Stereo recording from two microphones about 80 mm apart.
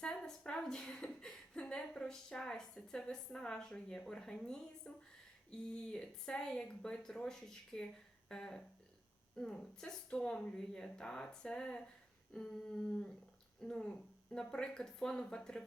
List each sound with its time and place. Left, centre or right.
0.0 s a woman's voice: centre